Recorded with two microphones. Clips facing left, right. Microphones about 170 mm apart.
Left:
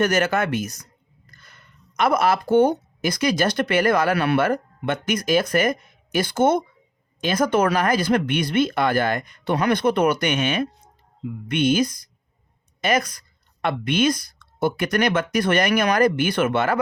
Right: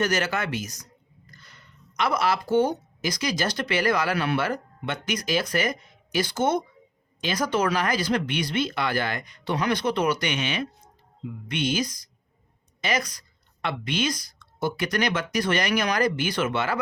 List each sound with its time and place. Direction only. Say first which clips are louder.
0.0 s a woman's voice: left 5 dB; 55° left (ahead or behind)